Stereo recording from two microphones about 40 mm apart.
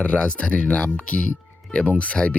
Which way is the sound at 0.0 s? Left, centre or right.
Left.